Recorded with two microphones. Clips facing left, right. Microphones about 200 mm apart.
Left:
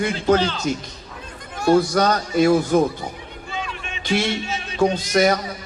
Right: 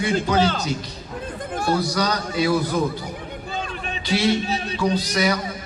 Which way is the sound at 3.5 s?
40° right (ahead or behind).